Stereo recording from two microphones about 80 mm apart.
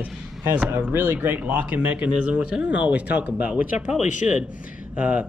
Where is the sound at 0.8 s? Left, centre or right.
Right.